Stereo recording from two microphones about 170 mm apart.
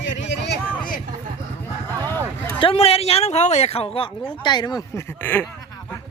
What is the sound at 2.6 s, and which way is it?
Speech, 35° left (ahead or behind).